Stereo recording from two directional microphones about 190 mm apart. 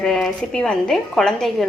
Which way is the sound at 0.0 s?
5° left (ahead or behind).